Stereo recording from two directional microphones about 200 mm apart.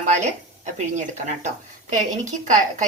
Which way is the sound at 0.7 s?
35° right (ahead or behind).